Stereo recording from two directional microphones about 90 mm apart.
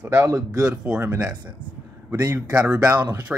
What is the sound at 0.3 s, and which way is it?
Speech, 10° right (ahead or behind).